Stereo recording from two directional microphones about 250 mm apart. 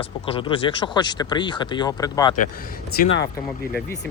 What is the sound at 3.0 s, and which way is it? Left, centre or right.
Speech, left.